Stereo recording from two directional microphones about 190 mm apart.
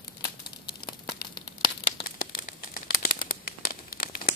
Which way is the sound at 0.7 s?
25° left (ahead or behind).